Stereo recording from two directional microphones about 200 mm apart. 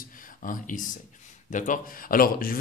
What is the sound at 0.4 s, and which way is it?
Speech, 40° left (ahead or behind).